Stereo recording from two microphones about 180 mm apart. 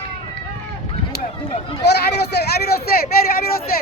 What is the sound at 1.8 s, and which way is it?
A man's voice, 65° left (ahead or behind).